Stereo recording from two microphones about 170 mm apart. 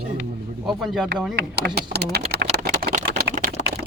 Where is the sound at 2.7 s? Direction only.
55° right (ahead or behind).